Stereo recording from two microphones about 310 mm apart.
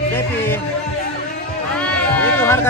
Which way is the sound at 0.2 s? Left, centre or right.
Centre.